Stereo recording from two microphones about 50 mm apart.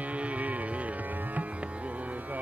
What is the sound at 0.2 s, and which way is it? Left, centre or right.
Music, right.